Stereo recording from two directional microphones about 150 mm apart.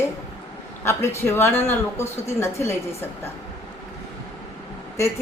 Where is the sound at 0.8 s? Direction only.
15° left (ahead or behind).